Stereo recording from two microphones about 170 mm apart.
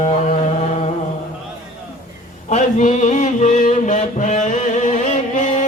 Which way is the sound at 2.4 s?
45° left (ahead or behind).